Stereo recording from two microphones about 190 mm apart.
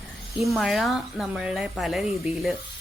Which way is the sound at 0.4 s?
Centre (ahead or behind).